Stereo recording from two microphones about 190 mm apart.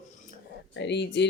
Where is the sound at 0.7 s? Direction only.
65° left (ahead or behind).